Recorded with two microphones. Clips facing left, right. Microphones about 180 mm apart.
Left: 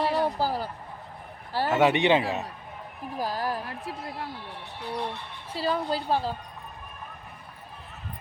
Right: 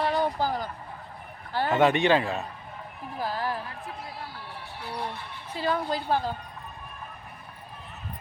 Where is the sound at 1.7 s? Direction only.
10° left (ahead or behind).